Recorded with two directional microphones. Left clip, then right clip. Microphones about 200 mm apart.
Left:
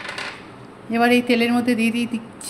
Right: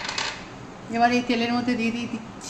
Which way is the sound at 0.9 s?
40° left (ahead or behind).